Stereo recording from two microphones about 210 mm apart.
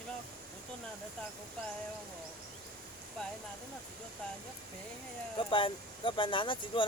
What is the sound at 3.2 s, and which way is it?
Speech, 5° left (ahead or behind).